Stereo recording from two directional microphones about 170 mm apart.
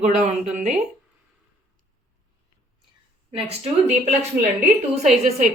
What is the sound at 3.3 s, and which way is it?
Speech, 30° right (ahead or behind).